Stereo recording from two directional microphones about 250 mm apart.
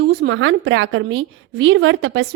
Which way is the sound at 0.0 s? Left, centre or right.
Right.